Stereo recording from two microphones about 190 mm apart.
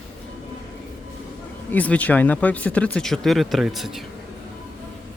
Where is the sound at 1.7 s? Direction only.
10° left (ahead or behind).